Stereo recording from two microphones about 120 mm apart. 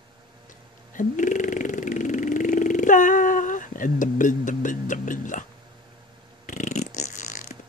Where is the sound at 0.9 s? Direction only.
90° left.